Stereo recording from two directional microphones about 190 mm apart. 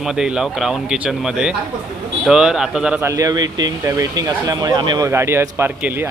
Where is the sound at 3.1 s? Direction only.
20° right (ahead or behind).